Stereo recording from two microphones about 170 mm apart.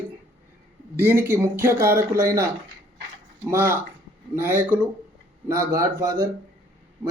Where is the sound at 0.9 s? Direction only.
15° right (ahead or behind).